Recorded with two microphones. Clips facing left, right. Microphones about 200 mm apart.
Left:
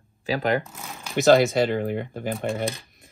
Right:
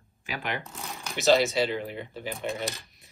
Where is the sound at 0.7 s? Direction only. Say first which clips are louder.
Even; centre (ahead or behind).